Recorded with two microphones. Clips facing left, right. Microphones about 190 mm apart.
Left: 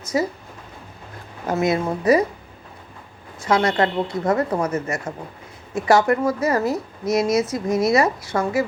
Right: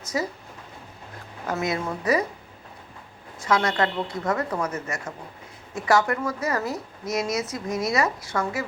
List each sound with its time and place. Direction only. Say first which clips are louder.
1.5 s a woman's voice: left 6 dB; 30° left (ahead or behind)
3.4 s speech: left 4 dB; 30° left (ahead or behind)